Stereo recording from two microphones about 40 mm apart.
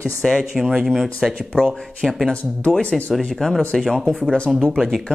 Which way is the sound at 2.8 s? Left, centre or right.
Left.